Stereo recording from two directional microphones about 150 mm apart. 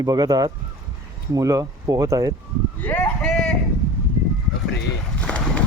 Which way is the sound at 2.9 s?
10° left (ahead or behind).